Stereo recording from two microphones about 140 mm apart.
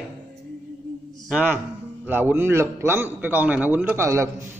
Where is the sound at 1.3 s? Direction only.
15° right (ahead or behind).